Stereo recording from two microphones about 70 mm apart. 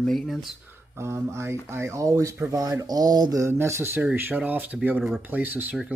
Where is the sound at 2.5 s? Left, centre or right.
Right.